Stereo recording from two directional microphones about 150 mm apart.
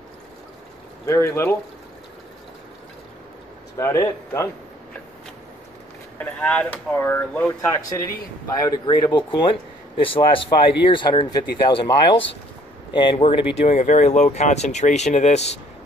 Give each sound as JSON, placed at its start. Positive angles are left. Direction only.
{"t": 1.0, "sound": "speech", "side_deg": 15}
{"t": 3.7, "sound": "speech", "side_deg": 20}
{"t": 6.1, "sound": "speech", "side_deg": 10}